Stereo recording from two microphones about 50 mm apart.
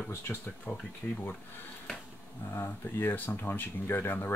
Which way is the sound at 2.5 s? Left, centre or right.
Left.